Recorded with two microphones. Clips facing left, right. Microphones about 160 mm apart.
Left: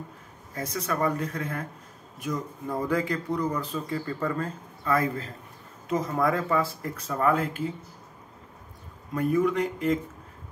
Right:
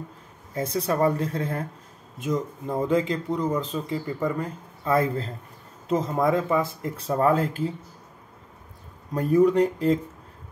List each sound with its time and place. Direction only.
0.6 s speech: 30° right (ahead or behind)
9.1 s speech: 35° right (ahead or behind)